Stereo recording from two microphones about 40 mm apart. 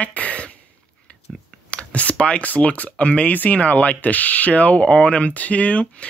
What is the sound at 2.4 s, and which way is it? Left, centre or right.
Speech, left.